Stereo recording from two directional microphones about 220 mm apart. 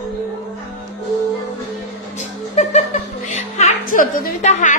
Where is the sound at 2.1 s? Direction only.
30° left (ahead or behind).